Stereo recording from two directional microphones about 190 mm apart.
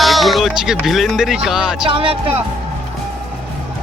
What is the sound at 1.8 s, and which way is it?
Speech, 30° right (ahead or behind).